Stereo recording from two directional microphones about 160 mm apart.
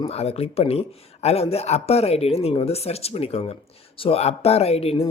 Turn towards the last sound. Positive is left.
turn(degrees=40)  # may be behind; listen again after turning